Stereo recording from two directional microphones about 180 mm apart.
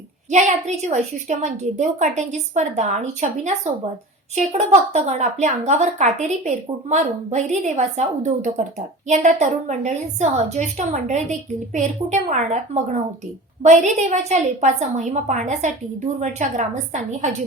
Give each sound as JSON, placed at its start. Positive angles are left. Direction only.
{"t": 0.3, "sound": "a woman's voice", "side_deg": -40}